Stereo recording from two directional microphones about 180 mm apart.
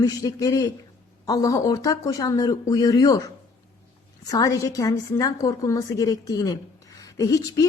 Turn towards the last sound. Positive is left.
turn(degrees=20)  # may be behind; listen again after turning